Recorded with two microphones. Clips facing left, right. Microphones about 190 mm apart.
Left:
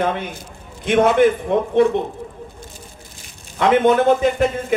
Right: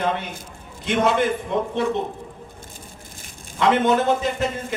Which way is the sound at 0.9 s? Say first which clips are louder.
Left 6 dB; 55° left (ahead or behind).